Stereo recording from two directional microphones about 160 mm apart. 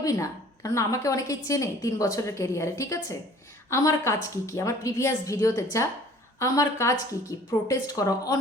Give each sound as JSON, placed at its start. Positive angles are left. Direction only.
{"t": 0.0, "sound": "a woman's voice", "side_deg": 20}